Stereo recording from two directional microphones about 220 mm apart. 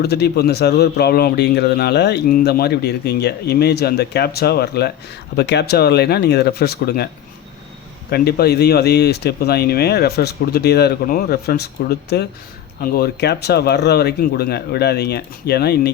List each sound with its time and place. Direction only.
0.0 s a man's voice: 45° left (ahead or behind)
8.1 s a man's voice: 45° left (ahead or behind)